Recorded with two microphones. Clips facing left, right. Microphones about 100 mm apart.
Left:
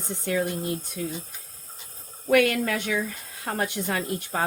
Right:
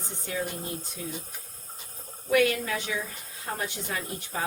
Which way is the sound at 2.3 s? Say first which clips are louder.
Left 3 dB; 60° left (ahead or behind).